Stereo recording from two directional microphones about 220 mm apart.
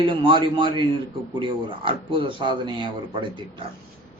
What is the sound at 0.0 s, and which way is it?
Speech, 20° right (ahead or behind).